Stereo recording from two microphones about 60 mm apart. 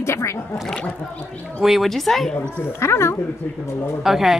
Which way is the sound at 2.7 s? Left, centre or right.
Left.